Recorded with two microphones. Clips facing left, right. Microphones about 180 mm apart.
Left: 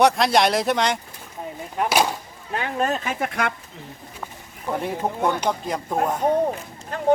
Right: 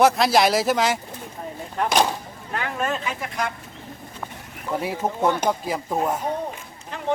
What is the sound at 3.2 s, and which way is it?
Speech, 65° left (ahead or behind).